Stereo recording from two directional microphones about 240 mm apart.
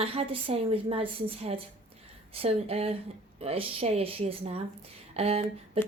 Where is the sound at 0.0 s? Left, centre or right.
Right.